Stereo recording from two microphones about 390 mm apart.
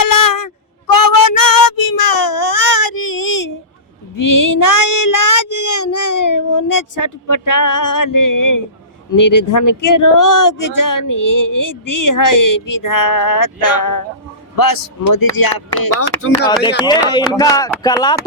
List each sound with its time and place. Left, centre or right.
0.0 s a sound: left
4.1 s child singing: left
9.1 s speech: left
16.0 s speech: left
16.8 s speech: centre